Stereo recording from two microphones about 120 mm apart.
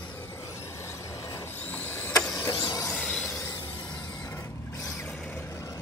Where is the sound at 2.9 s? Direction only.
5° left (ahead or behind).